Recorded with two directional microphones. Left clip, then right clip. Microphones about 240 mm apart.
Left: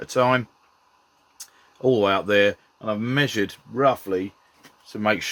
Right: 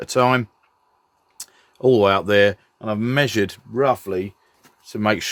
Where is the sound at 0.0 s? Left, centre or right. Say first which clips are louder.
Right 2 dB; right.